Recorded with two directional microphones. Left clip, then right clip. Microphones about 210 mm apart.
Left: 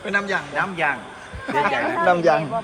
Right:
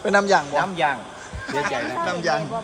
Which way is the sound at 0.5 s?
50° right (ahead or behind).